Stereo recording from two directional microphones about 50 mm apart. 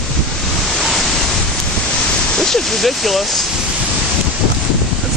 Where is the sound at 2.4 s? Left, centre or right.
Centre.